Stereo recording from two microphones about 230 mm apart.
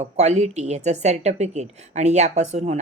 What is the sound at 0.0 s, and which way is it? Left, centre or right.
A woman's voice, right.